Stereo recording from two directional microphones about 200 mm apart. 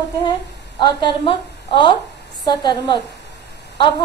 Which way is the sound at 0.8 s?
25° left (ahead or behind).